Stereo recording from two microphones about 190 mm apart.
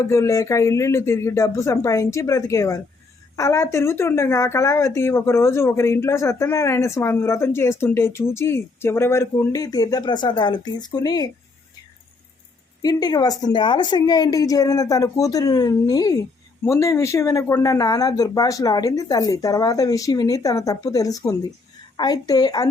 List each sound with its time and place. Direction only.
0.0 s speech: 15° left (ahead or behind)
12.8 s a woman's voice: 20° left (ahead or behind)